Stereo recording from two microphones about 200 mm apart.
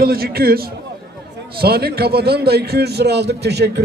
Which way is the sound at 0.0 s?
50° right (ahead or behind).